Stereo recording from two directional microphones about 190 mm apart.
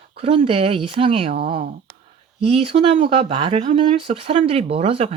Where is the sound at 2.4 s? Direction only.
30° right (ahead or behind).